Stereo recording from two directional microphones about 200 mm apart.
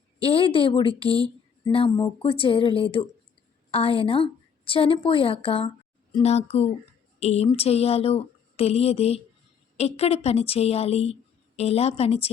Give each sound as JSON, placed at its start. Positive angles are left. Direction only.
{"t": 0.2, "sound": "a woman's voice", "side_deg": 25}